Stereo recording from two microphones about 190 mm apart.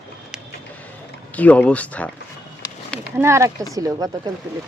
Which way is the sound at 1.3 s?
10° left (ahead or behind).